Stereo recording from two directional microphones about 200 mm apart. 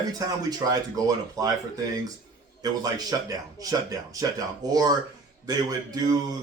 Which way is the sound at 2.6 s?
20° right (ahead or behind).